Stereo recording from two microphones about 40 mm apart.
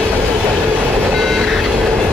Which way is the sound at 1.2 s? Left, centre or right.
Centre.